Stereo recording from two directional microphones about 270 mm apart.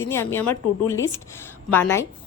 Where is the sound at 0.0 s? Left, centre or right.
Centre.